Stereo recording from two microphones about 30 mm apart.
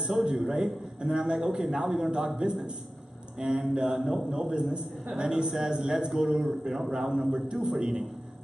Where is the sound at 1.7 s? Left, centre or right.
Right.